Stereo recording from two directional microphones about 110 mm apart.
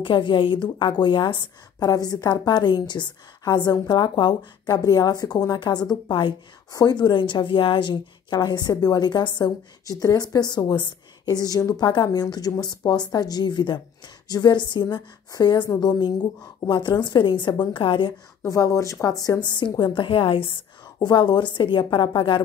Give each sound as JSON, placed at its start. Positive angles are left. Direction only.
{"t": 0.0, "sound": "a woman's voice", "side_deg": 50}
{"t": 18.4, "sound": "a woman's voice", "side_deg": 30}
{"t": 21.0, "sound": "a woman's voice", "side_deg": 40}